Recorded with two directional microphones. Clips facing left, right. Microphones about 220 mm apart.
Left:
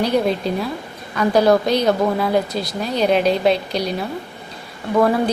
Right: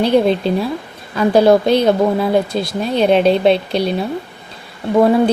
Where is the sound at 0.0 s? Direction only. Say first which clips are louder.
Right 5 dB; 30° right (ahead or behind).